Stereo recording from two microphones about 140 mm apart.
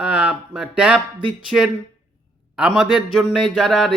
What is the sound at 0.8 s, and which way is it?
Speech, 10° right (ahead or behind).